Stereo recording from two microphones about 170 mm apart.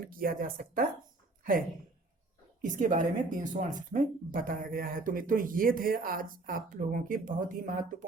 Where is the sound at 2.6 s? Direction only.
50° right (ahead or behind).